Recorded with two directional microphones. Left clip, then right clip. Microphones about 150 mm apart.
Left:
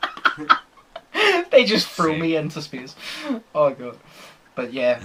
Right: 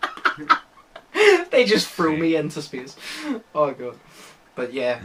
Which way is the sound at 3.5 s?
25° left (ahead or behind).